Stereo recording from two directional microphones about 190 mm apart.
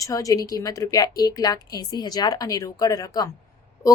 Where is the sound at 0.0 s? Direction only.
15° left (ahead or behind).